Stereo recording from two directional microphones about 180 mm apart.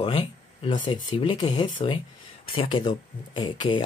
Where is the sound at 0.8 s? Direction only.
30° left (ahead or behind).